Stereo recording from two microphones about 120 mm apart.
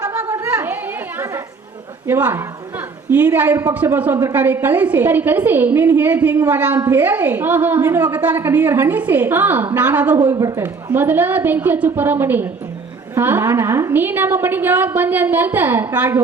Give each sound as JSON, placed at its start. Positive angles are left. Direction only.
{"t": 2.0, "sound": "a woman's voice", "side_deg": -20}
{"t": 10.3, "sound": "speech", "side_deg": -30}
{"t": 10.9, "sound": "a woman's voice", "side_deg": -15}